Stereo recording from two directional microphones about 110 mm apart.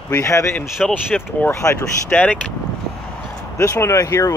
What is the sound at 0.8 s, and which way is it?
Speech, 5° left (ahead or behind).